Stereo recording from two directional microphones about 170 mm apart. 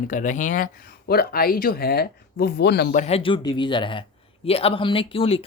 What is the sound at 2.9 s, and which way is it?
Speech, 40° left (ahead or behind).